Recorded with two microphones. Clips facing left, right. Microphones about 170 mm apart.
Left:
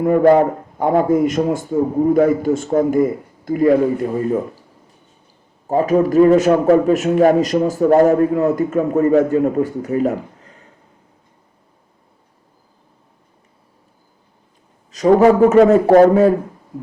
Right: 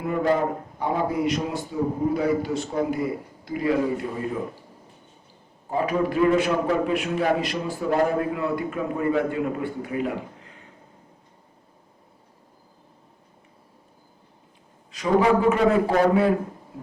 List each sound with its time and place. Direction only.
0.0 s a man's voice: 50° left (ahead or behind)
5.6 s a man's voice: 45° left (ahead or behind)
14.9 s a man's voice: 40° left (ahead or behind)